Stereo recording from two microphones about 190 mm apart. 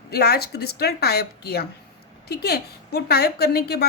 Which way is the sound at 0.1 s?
55° left (ahead or behind).